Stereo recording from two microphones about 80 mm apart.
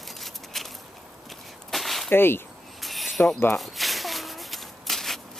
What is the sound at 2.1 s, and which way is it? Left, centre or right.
Speech, left.